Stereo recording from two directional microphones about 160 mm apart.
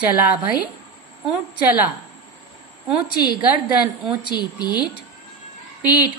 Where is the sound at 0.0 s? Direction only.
10° right (ahead or behind).